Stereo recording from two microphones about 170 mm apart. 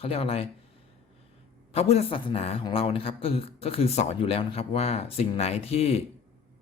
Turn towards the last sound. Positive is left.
turn(degrees=35)  # may be behind; listen again after turning